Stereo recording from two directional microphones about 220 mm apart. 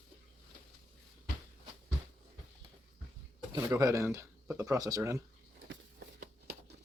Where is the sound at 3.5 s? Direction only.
15° right (ahead or behind).